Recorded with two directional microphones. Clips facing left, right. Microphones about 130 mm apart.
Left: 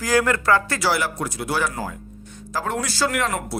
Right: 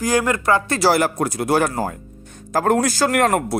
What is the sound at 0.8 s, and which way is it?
Speech, 45° right (ahead or behind).